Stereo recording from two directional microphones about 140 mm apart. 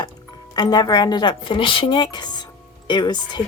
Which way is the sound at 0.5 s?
30° left (ahead or behind).